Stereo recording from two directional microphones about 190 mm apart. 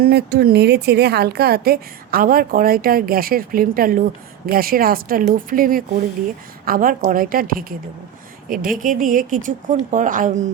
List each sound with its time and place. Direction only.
0.0 s a woman's voice: 60° right (ahead or behind); by 10.5 s 40° right (ahead or behind)